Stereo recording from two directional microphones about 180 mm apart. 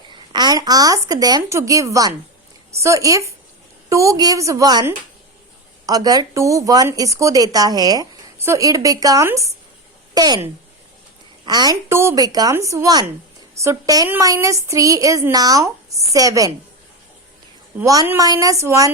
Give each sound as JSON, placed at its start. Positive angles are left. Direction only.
{"t": 0.1, "sound": "a woman's voice", "side_deg": -25}
{"t": 17.7, "sound": "a woman's voice", "side_deg": -15}